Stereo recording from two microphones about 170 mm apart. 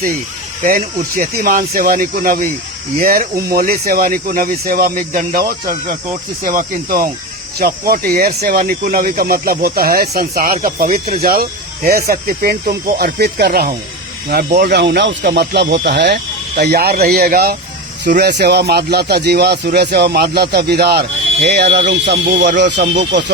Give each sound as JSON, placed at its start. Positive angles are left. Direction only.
{"t": 0.6, "sound": "speech", "side_deg": -55}
{"t": 18.2, "sound": "speech", "side_deg": -80}
{"t": 21.5, "sound": "speech", "side_deg": -80}